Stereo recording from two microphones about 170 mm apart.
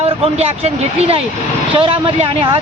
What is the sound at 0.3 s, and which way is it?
Speech, 35° right (ahead or behind).